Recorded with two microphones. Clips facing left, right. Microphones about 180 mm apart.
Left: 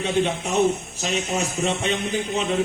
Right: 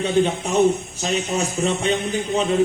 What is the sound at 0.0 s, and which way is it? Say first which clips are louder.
A man's voice: right 3 dB; 40° right (ahead or behind).